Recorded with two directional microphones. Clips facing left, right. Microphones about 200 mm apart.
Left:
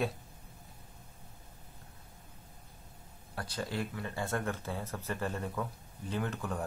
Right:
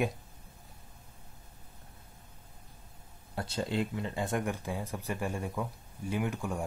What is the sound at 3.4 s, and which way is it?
Speech, 25° right (ahead or behind).